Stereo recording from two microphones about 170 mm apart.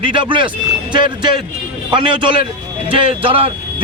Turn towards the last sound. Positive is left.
turn(degrees=-30)  # may be behind; listen again after turning